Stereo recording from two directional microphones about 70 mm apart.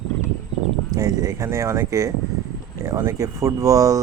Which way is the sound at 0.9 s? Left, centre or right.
Right.